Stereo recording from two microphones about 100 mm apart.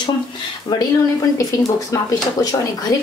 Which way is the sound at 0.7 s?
45° left (ahead or behind).